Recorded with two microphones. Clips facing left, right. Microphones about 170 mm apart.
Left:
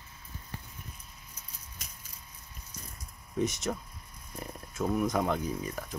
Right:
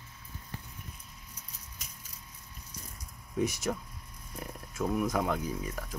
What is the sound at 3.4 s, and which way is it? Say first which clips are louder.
Speech: even; 10° right (ahead or behind).